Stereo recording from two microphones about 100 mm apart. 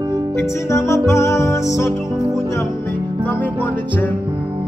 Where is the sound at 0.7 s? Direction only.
30° left (ahead or behind).